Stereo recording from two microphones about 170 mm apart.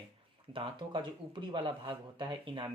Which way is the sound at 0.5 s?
30° right (ahead or behind).